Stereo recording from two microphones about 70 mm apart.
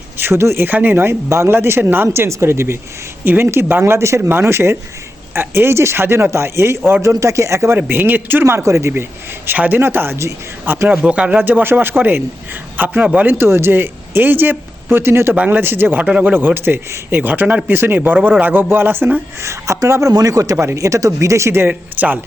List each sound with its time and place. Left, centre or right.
0.2 s speech: right
4.2 s speech: right
7.1 s speech: right
7.8 s speech: right
9.5 s speech: right
10.8 s speech: centre
11.3 s speech: right
13.4 s speech: right
15.4 s speech: right
16.0 s speech: centre
16.3 s speech: right
19.5 s speech: right
21.7 s speech: right